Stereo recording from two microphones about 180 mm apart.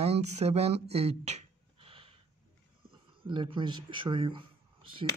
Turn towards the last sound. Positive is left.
turn(degrees=-30)  # may be behind; listen again after turning